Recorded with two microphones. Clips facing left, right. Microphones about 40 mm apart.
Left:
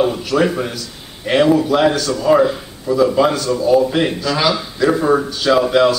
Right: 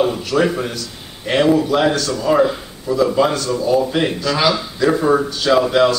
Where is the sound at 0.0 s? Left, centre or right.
Centre.